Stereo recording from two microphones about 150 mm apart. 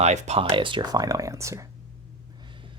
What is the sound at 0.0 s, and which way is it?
Speech, 50° right (ahead or behind).